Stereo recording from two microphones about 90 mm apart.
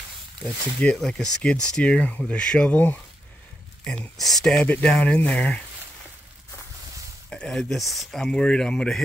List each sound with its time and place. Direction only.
0.4 s speech: 15° left (ahead or behind)
0.9 s speech: 5° left (ahead or behind)
3.8 s speech: 15° left (ahead or behind)
4.2 s speech: 5° left (ahead or behind)
4.6 s speech: 15° left (ahead or behind)
7.2 s speech: 10° left (ahead or behind)